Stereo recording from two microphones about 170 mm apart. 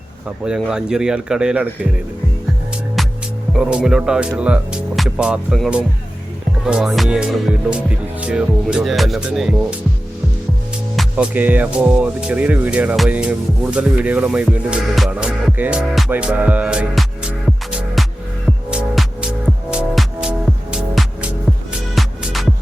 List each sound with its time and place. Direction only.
0.4 s speech: 5° right (ahead or behind)
3.5 s speech: 5° right (ahead or behind)
10.9 s music: 10° right (ahead or behind)